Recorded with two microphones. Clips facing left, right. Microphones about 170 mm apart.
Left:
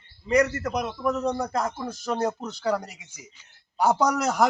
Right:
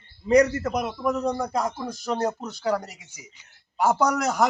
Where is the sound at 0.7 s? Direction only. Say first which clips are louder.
Right 1 dB; 10° right (ahead or behind).